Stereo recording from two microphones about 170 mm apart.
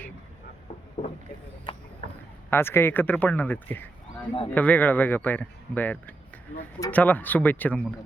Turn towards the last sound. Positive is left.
turn(degrees=10)  # may be behind; listen again after turning